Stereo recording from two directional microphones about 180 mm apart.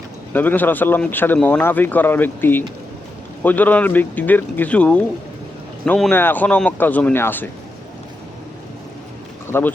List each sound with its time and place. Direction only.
0.3 s speech: 10° left (ahead or behind)
9.5 s speech: 10° left (ahead or behind)